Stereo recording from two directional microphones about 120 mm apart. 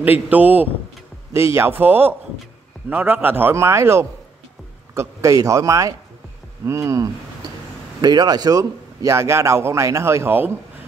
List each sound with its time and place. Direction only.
0.0 s a man's voice: 15° right (ahead or behind)